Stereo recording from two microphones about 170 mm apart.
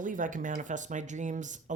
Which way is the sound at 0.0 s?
50° right (ahead or behind).